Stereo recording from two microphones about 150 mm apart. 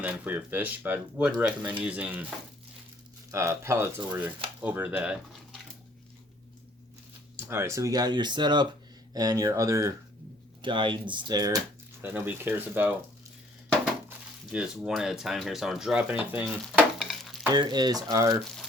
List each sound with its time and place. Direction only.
0.0 s speech: 10° right (ahead or behind)
3.3 s speech: 20° right (ahead or behind)
7.3 s speech: 15° right (ahead or behind)
10.6 s speech: 35° right (ahead or behind)
12.0 s speech: 15° right (ahead or behind)
14.5 s speech: 5° right (ahead or behind)
17.0 s stir: centre (ahead or behind)
17.5 s speech: 30° right (ahead or behind)